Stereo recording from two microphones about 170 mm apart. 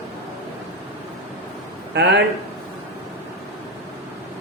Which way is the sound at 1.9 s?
85° right.